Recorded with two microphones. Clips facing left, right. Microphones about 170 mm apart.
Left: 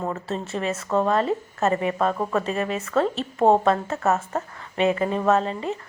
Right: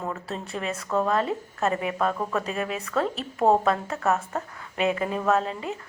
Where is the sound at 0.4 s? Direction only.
Centre (ahead or behind).